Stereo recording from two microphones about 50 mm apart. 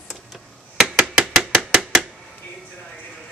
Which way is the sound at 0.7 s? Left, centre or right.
Centre.